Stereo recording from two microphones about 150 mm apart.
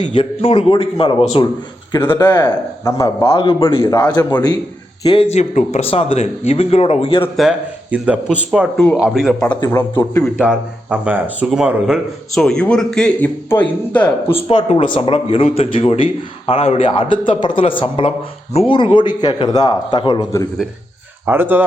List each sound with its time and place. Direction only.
0.0 s a man's voice: 35° left (ahead or behind)
2.0 s a man's voice: 15° left (ahead or behind)
5.0 s a man's voice: 35° left (ahead or behind)
7.3 s a man's voice: 5° right (ahead or behind)
10.0 s speech: 10° left (ahead or behind)
10.4 s speech: 5° right (ahead or behind)
12.3 s speech: 5° left (ahead or behind)
14.3 s a man's voice: 35° left (ahead or behind)
18.9 s a man's voice: 30° left (ahead or behind)
21.2 s speech: 15° right (ahead or behind)